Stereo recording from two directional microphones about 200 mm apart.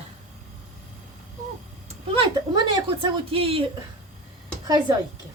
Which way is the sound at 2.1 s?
25° right (ahead or behind).